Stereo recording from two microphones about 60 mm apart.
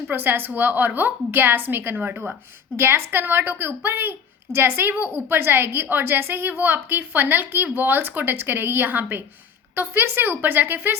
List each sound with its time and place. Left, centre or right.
0.1 s speech: right
2.7 s speech: right